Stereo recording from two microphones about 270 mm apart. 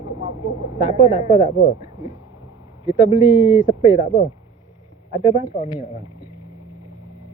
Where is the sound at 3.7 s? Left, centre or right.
Left.